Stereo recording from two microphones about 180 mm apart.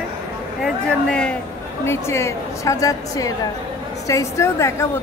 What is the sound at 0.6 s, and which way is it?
A woman's voice, 5° left (ahead or behind).